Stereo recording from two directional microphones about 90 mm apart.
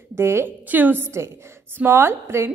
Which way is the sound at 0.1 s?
30° right (ahead or behind).